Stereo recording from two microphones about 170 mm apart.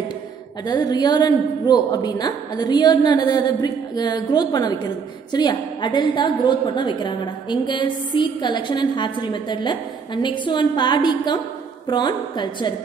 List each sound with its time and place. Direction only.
0.7 s a woman's voice: 25° left (ahead or behind)